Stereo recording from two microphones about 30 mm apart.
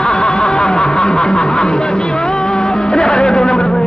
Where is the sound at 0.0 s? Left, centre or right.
Left.